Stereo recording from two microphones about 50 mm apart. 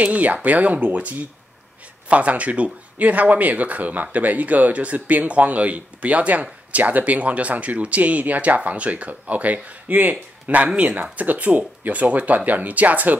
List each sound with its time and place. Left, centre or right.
0.0 s speech: right
2.0 s speech: right